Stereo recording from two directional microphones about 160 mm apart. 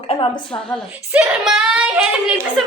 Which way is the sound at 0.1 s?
35° left (ahead or behind).